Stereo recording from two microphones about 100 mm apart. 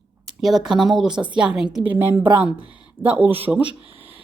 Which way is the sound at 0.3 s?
Centre (ahead or behind).